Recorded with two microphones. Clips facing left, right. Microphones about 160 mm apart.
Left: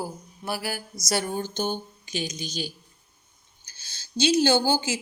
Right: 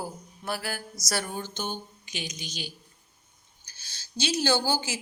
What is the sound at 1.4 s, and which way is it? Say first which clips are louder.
Speech: left 6 dB; 35° left (ahead or behind).